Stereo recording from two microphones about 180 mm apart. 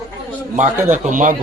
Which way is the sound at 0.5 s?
45° right (ahead or behind).